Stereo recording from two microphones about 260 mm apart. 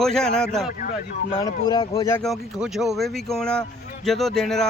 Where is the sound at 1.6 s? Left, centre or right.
Centre.